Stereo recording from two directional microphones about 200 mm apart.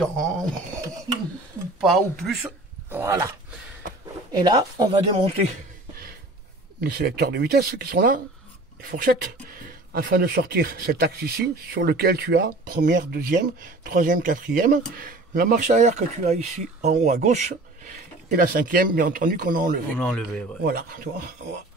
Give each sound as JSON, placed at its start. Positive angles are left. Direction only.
{"t": 0.0, "sound": "speech", "side_deg": 5}
{"t": 1.8, "sound": "speech", "side_deg": 0}
{"t": 4.4, "sound": "speech", "side_deg": -20}
{"t": 6.8, "sound": "speech", "side_deg": -50}
{"t": 20.0, "sound": "speech", "side_deg": 5}
{"t": 20.6, "sound": "speech", "side_deg": -50}